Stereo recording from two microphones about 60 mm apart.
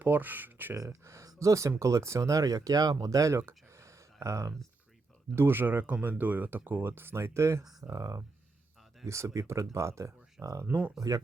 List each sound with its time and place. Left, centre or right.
0.0 s speech: right
0.9 s speech: right
3.4 s a sound: right
5.3 s speech: right
7.6 s speech: centre
7.9 s speech: right
9.0 s speech: right
10.4 s speech: right